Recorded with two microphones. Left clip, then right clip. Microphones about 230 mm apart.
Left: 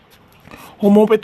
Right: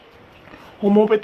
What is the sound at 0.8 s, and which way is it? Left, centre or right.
Speech, left.